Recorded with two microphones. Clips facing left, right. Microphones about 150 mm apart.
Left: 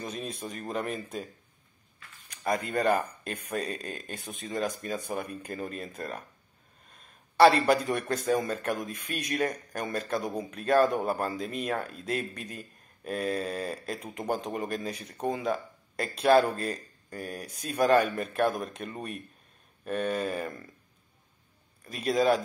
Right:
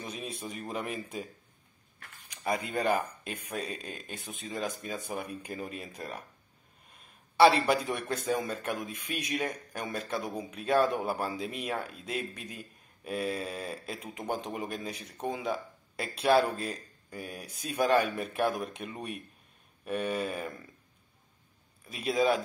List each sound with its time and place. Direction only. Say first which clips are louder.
0.0 s speech: left 3 dB; 5° right (ahead or behind)
2.4 s speech: left 3 dB; 5° right (ahead or behind)
4.1 s speech: left 3 dB; 55° left (ahead or behind)
5.1 s a man's voice: left 2 dB; 10° right (ahead or behind)
21.8 s speech: left 2 dB; centre (ahead or behind)